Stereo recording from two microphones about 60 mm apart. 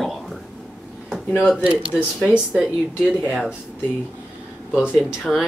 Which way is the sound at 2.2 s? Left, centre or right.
Centre.